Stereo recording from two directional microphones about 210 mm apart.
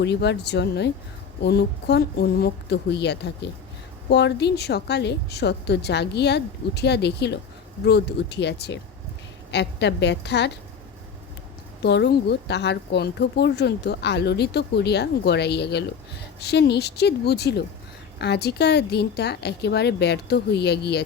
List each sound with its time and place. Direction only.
0.0 s a woman's voice: 55° left (ahead or behind)
11.8 s a woman's voice: 55° left (ahead or behind)